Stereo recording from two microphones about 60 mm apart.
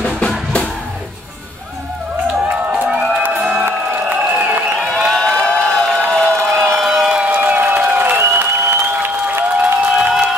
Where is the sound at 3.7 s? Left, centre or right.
Right.